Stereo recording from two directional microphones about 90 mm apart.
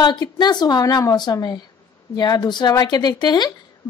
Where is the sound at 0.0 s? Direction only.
50° left (ahead or behind).